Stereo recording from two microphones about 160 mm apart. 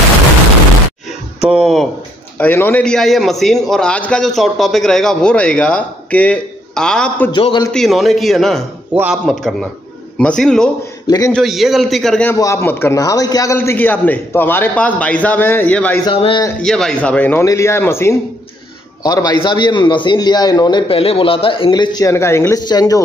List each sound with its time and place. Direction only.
1.5 s a man's voice: centre (ahead or behind)
2.3 s a man's voice: 10° left (ahead or behind)
7.3 s a man's voice: 30° left (ahead or behind)
7.7 s a man's voice: centre (ahead or behind)
11.1 s a man's voice: 20° left (ahead or behind)
11.3 s a man's voice: centre (ahead or behind)
12.3 s a man's voice: 15° left (ahead or behind)
16.1 s speech: 30° left (ahead or behind)
16.6 s a man's voice: 5° left (ahead or behind); by 23.0 s 25° left (ahead or behind)